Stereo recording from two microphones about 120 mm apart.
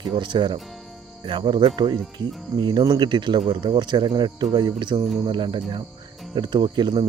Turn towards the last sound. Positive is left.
turn(degrees=-35)  # may be behind; listen again after turning